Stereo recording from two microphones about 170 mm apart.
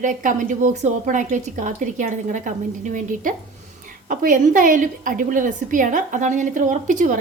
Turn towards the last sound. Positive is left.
turn(degrees=-50)  # may be behind; listen again after turning